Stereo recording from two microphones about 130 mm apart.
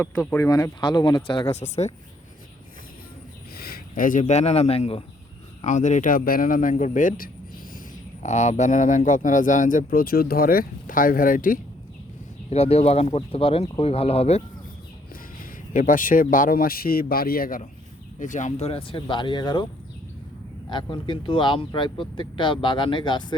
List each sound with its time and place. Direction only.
0.0 s speech: 10° left (ahead or behind)
0.3 s speech: 25° left (ahead or behind)
1.5 s speech: 60° left (ahead or behind)
3.9 s speech: 90° left; by 5.0 s 50° left (ahead or behind)
5.6 s a man's voice: 70° left (ahead or behind); by 7.3 s 85° left
8.2 s a man's voice: 65° left (ahead or behind); by 11.6 s 90° left
12.5 s speech: 50° left (ahead or behind)
15.7 s a man's voice: 90° left
18.2 s speech: 70° left (ahead or behind)
18.7 s speech: 45° left (ahead or behind)
20.7 s speech: 35° left (ahead or behind)